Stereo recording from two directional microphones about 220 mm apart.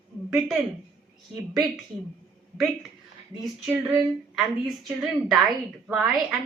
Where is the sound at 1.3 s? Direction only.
Centre (ahead or behind).